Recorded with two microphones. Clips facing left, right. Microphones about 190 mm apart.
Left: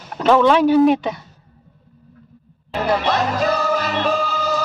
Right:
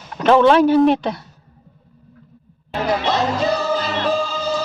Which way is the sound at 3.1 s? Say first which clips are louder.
Even; 25° right (ahead or behind).